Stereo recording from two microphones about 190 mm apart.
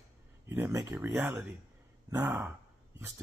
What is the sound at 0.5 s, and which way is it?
Speech, 15° right (ahead or behind).